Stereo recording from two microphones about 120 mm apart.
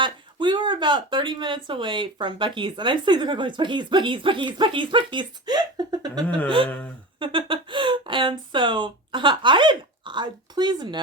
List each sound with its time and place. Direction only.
0.0 s speech: 40° right (ahead or behind)
6.7 s speech: 15° left (ahead or behind)
7.2 s speech: 45° right (ahead or behind)